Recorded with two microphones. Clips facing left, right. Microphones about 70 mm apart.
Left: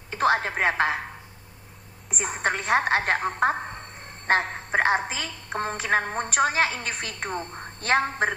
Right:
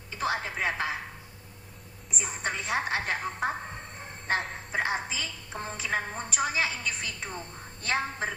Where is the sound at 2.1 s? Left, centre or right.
Left.